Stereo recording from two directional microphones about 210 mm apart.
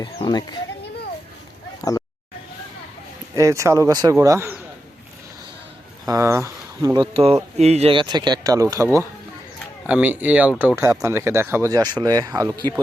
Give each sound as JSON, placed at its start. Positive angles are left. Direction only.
{"t": 0.0, "sound": "speech", "side_deg": 20}
{"t": 1.8, "sound": "a sound", "side_deg": 15}
{"t": 3.3, "sound": "speech", "side_deg": -15}
{"t": 6.1, "sound": "speech", "side_deg": -15}